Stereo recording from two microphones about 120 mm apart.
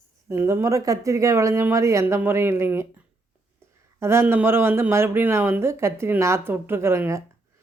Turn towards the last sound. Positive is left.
turn(degrees=-20)  # may be behind; listen again after turning